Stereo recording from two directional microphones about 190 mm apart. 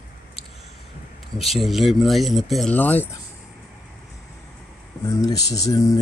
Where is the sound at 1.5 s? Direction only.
Centre (ahead or behind).